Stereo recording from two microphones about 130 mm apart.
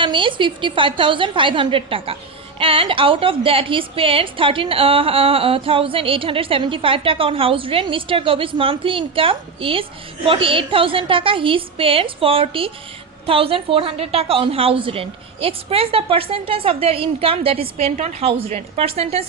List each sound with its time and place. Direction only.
0.0 s a woman's voice: 40° right (ahead or behind)
17.9 s a woman's voice: 60° right (ahead or behind)
18.3 s a woman's voice: 50° right (ahead or behind)